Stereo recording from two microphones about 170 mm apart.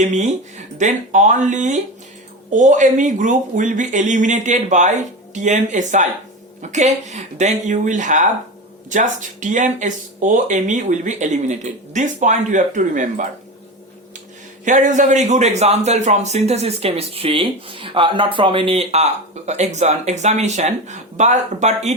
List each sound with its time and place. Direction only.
0.0 s speech: 45° right (ahead or behind)
14.6 s a man's voice: 50° right (ahead or behind)